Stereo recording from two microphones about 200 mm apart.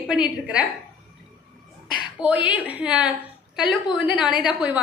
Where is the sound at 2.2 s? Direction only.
Centre (ahead or behind).